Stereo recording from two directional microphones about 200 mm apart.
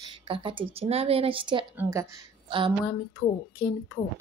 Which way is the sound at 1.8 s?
15° right (ahead or behind).